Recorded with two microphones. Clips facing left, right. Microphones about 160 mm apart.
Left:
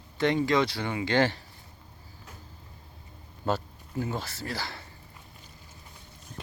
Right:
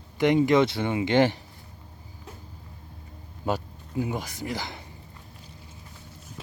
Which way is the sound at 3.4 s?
15° right (ahead or behind).